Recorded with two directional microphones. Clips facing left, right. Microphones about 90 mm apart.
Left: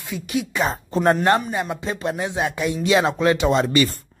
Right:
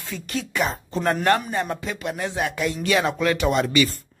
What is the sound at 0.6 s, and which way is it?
Speech, 30° left (ahead or behind).